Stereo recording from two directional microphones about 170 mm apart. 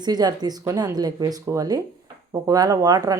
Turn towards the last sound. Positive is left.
turn(degrees=-20)  # may be behind; listen again after turning